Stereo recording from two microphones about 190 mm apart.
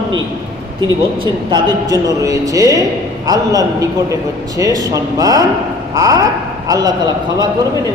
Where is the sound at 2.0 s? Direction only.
20° right (ahead or behind).